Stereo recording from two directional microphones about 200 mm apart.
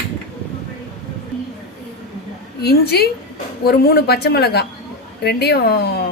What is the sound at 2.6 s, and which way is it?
A woman's voice, 55° left (ahead or behind).